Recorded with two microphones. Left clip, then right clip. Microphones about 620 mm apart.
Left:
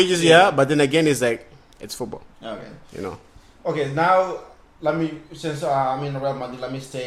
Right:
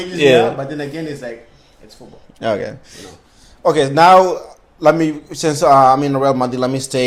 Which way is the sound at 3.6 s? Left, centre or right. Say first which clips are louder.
Right 10 dB; right.